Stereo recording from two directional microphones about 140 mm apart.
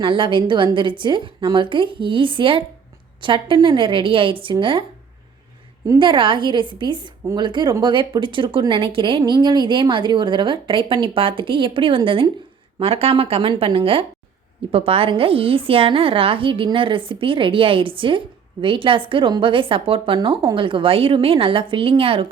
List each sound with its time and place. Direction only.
0.0 s speech: 35° right (ahead or behind)
6.0 s a woman's voice: 35° right (ahead or behind)